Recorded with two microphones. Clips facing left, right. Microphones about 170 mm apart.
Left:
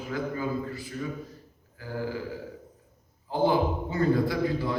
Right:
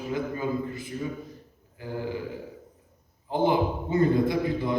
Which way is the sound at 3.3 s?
20° right (ahead or behind).